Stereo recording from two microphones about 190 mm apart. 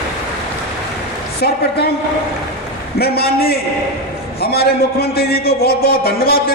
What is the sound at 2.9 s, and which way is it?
A man's voice, 55° left (ahead or behind).